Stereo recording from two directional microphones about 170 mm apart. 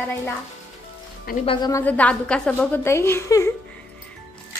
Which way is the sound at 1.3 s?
60° left (ahead or behind).